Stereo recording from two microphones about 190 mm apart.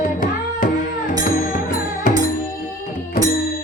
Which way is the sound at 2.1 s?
45° left (ahead or behind).